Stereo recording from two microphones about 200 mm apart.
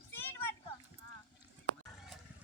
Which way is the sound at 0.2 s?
10° left (ahead or behind).